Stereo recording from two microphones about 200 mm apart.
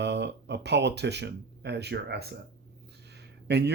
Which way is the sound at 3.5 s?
55° right (ahead or behind).